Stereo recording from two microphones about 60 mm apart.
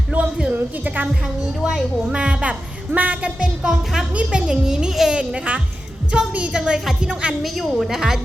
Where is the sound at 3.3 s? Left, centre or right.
Centre.